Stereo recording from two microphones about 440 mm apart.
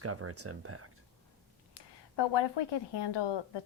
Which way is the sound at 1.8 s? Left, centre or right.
Left.